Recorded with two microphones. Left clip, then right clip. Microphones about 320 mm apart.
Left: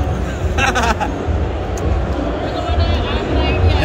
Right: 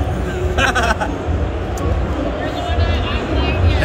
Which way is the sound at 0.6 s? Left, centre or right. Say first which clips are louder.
Left 1 dB; left.